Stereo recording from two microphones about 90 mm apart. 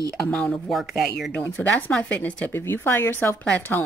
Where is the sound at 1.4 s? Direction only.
20° left (ahead or behind).